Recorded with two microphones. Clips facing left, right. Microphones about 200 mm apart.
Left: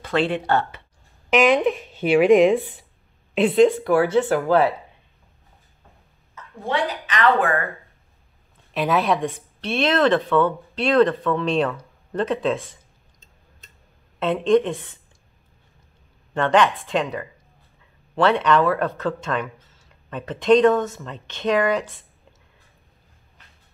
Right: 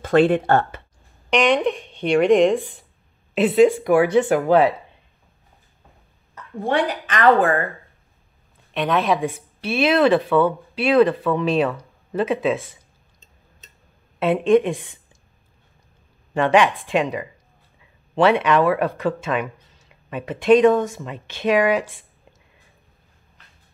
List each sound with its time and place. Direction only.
0.0 s speech: 50° right (ahead or behind)
1.3 s speech: 5° left (ahead or behind); by 4.7 s 15° right (ahead or behind)
6.3 s a woman's voice: 60° right (ahead or behind)
8.7 s speech: centre (ahead or behind)
14.2 s speech: 10° right (ahead or behind)
16.3 s speech: 10° right (ahead or behind)